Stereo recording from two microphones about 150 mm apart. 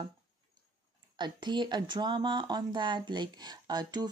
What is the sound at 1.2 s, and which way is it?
Speech, 30° right (ahead or behind).